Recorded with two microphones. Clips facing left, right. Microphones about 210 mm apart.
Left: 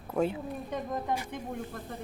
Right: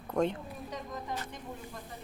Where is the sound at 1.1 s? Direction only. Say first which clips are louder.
Left 5 dB; 55° left (ahead or behind).